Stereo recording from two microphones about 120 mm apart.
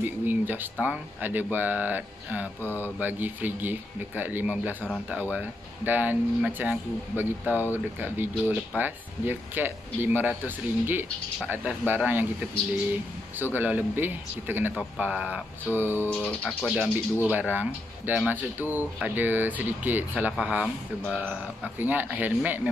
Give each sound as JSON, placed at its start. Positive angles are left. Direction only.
{"t": 0.0, "sound": "speech", "side_deg": -15}
{"t": 13.6, "sound": "speech", "side_deg": -15}
{"t": 16.1, "sound": "speech", "side_deg": 10}
{"t": 16.4, "sound": "speech", "side_deg": -5}
{"t": 21.7, "sound": "speech", "side_deg": -15}